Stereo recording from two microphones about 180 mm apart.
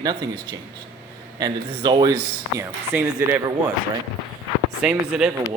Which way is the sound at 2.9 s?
10° right (ahead or behind).